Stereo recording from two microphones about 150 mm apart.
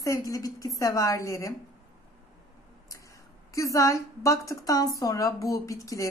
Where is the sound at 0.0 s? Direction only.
20° left (ahead or behind).